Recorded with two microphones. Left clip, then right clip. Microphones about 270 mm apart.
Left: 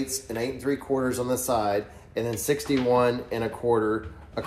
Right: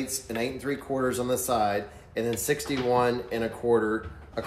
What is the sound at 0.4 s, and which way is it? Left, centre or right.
Speech, centre.